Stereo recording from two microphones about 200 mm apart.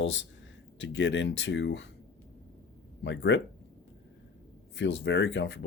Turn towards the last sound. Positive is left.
turn(degrees=65)  # may be behind; listen again after turning